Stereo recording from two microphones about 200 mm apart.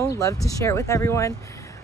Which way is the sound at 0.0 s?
15° left (ahead or behind).